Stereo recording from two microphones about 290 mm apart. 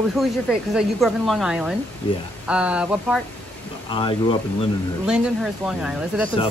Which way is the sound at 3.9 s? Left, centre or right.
Centre.